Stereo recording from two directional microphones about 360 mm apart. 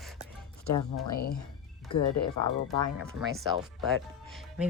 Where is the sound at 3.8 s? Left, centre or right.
Centre.